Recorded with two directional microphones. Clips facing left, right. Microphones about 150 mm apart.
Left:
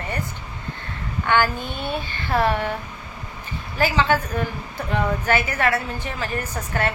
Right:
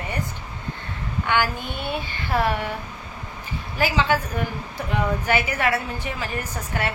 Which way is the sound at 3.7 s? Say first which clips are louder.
Left 2 dB; 10° right (ahead or behind).